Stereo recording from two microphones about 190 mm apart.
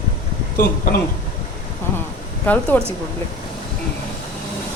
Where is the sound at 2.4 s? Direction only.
10° left (ahead or behind).